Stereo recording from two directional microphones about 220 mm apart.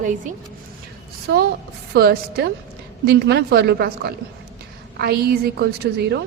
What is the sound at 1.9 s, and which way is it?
A woman's voice, 45° right (ahead or behind).